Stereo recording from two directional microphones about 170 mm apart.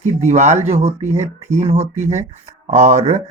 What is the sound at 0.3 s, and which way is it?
Speech, 45° right (ahead or behind).